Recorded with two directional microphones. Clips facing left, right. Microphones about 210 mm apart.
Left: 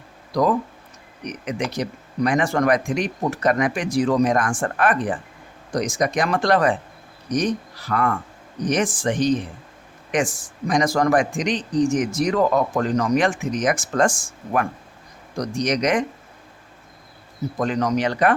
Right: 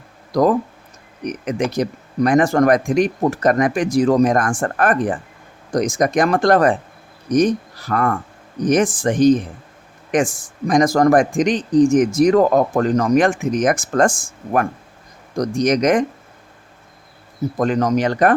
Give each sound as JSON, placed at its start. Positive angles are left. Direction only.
{"t": 1.2, "sound": "speech", "side_deg": -50}
{"t": 17.6, "sound": "speech", "side_deg": -45}